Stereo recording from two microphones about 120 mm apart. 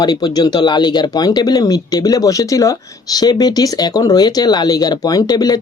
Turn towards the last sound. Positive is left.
turn(degrees=35)  # may be behind; listen again after turning